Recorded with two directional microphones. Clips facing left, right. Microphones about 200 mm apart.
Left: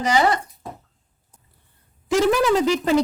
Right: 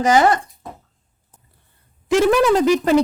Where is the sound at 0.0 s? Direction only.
50° right (ahead or behind).